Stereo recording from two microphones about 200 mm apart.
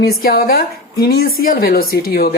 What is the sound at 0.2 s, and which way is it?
Speech, 45° left (ahead or behind).